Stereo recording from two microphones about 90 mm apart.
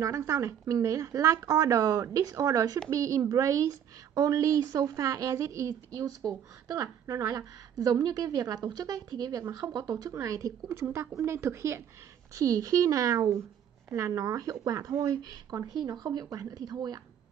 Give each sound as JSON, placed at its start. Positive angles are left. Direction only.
{"t": 0.0, "sound": "a woman's voice", "side_deg": -35}